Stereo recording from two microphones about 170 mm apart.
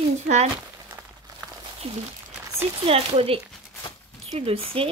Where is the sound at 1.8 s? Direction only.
35° right (ahead or behind).